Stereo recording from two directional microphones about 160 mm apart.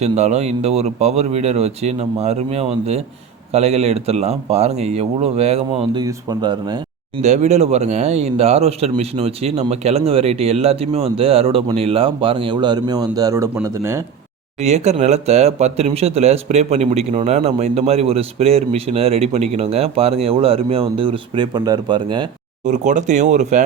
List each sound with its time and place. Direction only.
0.0 s speech: 40° right (ahead or behind); by 6.8 s 25° right (ahead or behind)
7.2 s speech: 45° right (ahead or behind); by 14.0 s 15° right (ahead or behind)
14.6 s speech: 45° right (ahead or behind); by 22.3 s 30° right (ahead or behind)
22.6 s speech: 50° right (ahead or behind)